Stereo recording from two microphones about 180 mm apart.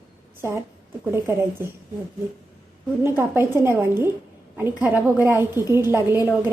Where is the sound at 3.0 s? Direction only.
15° right (ahead or behind).